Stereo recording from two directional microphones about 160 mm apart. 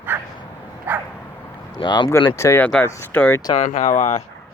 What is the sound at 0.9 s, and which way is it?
Dog, 10° right (ahead or behind).